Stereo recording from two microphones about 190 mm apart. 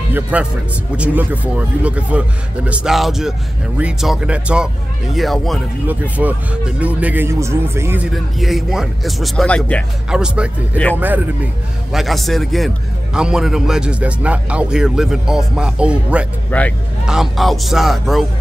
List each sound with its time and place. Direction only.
0.1 s a man's voice: 5° right (ahead or behind)
10.0 s a man's voice: 5° right (ahead or behind)
11.9 s a man's voice: centre (ahead or behind)
16.4 s a man's voice: 10° left (ahead or behind)